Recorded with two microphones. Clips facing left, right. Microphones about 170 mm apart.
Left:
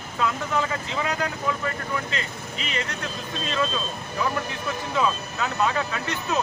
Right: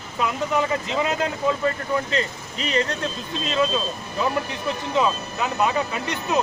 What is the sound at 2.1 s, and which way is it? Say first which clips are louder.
Speech: right 6 dB; 35° right (ahead or behind).